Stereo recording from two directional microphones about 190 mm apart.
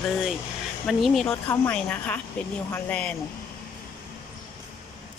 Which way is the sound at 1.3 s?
10° left (ahead or behind).